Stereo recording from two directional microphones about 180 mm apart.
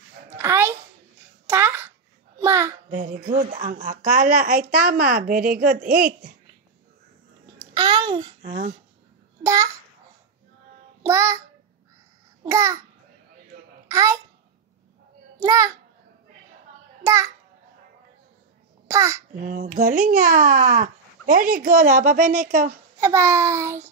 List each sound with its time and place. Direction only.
0.3 s a sound: 15° right (ahead or behind)
2.9 s a child's voice: 45° right (ahead or behind)
7.5 s a sound: 25° right (ahead or behind)
8.4 s speech: 45° right (ahead or behind)
9.4 s babbling: 15° right (ahead or behind)
11.0 s child singing: 15° right (ahead or behind)
12.4 s a child's voice: 15° right (ahead or behind)
13.8 s a child's voice: 15° right (ahead or behind)
15.3 s a child's voice: 15° right (ahead or behind)
17.0 s a child's voice: 15° right (ahead or behind)
18.9 s a child's voice: 15° right (ahead or behind)
19.4 s a child's voice: 50° right (ahead or behind)
22.9 s a child's voice: 15° right (ahead or behind)